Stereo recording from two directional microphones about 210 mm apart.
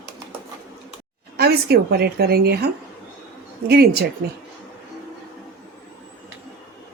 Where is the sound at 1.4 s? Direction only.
50° right (ahead or behind).